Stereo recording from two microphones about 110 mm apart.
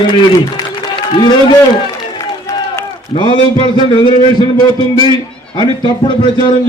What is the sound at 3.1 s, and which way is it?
A man's voice, 45° left (ahead or behind).